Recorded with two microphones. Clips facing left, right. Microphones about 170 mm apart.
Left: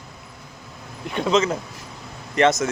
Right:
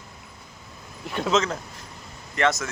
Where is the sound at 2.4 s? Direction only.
20° left (ahead or behind).